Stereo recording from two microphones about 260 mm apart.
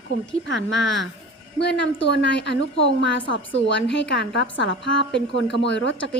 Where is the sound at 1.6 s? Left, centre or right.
Left.